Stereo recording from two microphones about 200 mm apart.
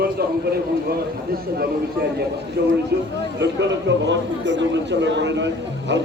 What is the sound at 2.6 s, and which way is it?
Speech, 50° right (ahead or behind).